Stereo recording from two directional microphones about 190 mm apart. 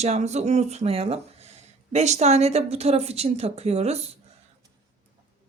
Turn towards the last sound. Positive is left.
turn(degrees=-35)  # may be behind; listen again after turning